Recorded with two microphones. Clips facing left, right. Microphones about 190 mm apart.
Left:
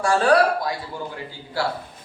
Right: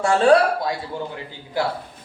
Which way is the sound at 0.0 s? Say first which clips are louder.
Right 2 dB; 25° right (ahead or behind).